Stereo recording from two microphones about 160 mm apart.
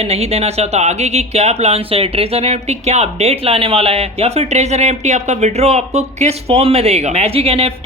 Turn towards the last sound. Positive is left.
turn(degrees=-40)  # may be behind; listen again after turning